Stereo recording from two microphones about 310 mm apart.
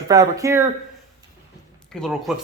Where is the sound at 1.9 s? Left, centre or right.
Centre.